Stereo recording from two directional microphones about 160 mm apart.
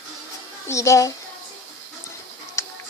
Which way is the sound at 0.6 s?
20° left (ahead or behind).